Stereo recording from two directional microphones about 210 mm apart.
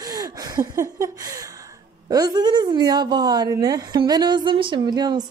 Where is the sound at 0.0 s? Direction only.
15° right (ahead or behind).